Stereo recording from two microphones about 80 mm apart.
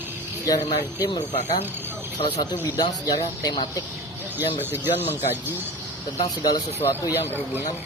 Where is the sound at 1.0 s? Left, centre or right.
Left.